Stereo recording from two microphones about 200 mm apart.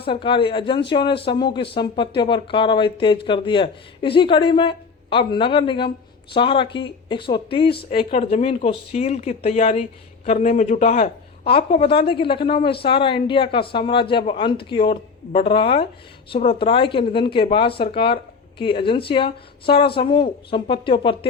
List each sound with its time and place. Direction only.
0.0 s speech: 25° left (ahead or behind)